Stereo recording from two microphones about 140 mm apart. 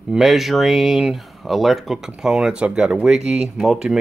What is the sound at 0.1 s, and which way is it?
Speech, centre (ahead or behind).